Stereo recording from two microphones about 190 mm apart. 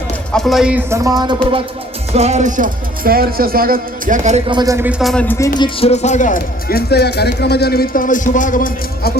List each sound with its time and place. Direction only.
0.3 s speech: centre (ahead or behind); by 1.6 s 25° right (ahead or behind)
2.1 s speech: 35° right (ahead or behind)
4.4 s speech: 20° right (ahead or behind)
4.9 s speech: centre (ahead or behind)
5.5 s speech: 30° left (ahead or behind); by 9.1 s 45° left (ahead or behind)